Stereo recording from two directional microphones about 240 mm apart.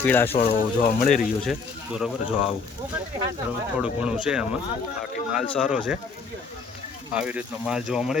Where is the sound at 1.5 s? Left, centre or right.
Centre.